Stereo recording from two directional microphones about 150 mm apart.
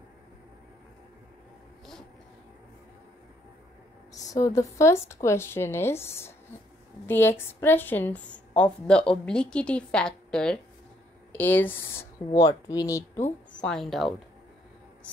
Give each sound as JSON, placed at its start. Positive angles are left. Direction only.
{"t": 4.1, "sound": "a woman's voice", "side_deg": 20}
{"t": 13.5, "sound": "speech", "side_deg": 5}